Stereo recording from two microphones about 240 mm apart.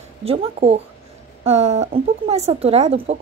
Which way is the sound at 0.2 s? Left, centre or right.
Right.